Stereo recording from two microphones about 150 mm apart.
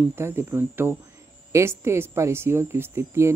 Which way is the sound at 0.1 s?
15° right (ahead or behind).